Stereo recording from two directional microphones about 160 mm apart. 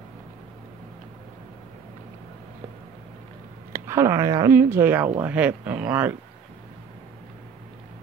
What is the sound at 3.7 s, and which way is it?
A woman's voice, 15° right (ahead or behind).